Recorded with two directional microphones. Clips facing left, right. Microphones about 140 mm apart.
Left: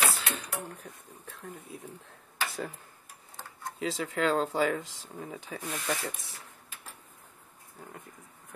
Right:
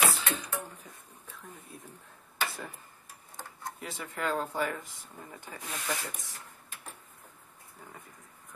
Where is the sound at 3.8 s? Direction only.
90° left.